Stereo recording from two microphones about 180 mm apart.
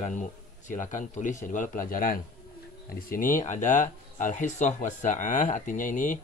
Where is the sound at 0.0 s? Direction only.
45° left (ahead or behind).